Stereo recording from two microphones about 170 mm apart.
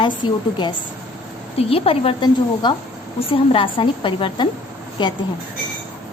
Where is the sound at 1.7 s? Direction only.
35° left (ahead or behind).